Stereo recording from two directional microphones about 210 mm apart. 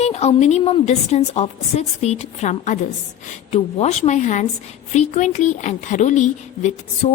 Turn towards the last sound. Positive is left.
turn(degrees=35)  # may be behind; listen again after turning